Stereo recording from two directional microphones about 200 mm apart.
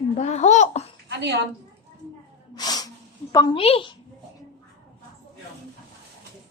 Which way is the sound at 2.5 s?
20° left (ahead or behind).